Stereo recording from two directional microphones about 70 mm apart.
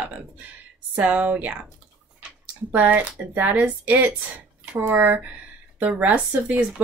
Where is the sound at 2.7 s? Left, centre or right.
Right.